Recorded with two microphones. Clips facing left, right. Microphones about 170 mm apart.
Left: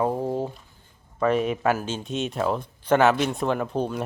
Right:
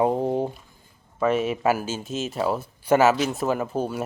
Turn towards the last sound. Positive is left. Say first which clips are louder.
# even
turn(degrees=-5)  # may be behind; listen again after turning